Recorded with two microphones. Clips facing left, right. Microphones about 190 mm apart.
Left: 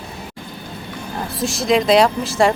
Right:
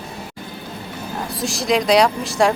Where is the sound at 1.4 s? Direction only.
Centre (ahead or behind).